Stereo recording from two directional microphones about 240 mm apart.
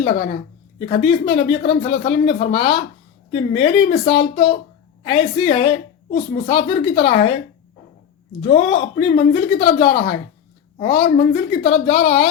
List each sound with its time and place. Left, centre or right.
0.9 s a woman's voice: left
8.4 s a woman's voice: left